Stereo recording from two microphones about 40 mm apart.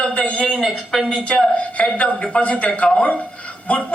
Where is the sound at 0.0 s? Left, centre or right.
Left.